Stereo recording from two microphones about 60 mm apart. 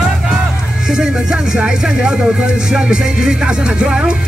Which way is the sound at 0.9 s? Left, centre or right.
Centre.